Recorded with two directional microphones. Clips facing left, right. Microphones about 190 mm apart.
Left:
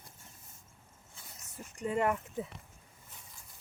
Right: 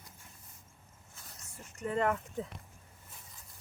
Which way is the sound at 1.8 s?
15° left (ahead or behind).